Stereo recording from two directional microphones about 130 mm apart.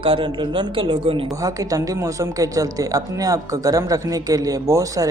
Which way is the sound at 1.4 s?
25° right (ahead or behind).